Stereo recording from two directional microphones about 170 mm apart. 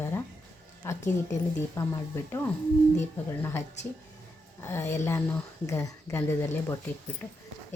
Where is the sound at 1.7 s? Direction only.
15° left (ahead or behind).